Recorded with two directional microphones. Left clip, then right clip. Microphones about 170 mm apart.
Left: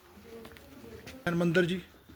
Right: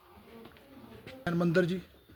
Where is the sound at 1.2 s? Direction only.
15° right (ahead or behind).